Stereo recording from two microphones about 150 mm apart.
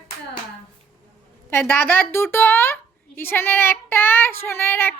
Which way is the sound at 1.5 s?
15° left (ahead or behind).